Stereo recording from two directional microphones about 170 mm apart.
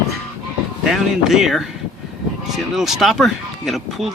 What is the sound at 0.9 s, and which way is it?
Speech, centre (ahead or behind).